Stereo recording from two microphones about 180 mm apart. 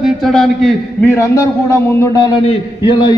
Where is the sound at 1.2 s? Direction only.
15° left (ahead or behind).